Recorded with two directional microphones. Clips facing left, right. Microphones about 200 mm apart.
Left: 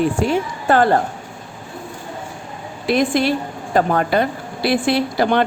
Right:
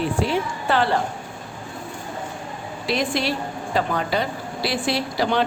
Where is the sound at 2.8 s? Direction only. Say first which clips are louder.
Left 6 dB; 50° left (ahead or behind).